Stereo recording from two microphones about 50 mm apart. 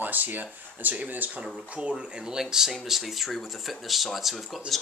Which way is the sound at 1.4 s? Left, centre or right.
Centre.